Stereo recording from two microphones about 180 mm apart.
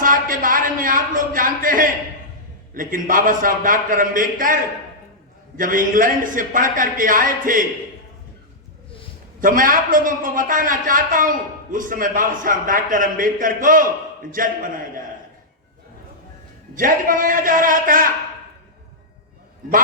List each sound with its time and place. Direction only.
0.0 s a sound: 50° right (ahead or behind)
2.7 s a man's voice: 50° right (ahead or behind)
5.5 s a man's voice: 50° right (ahead or behind)
9.4 s a man's voice: 50° right (ahead or behind)
16.7 s a man's voice: 50° right (ahead or behind)